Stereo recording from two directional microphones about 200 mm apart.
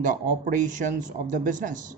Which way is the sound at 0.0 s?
40° right (ahead or behind).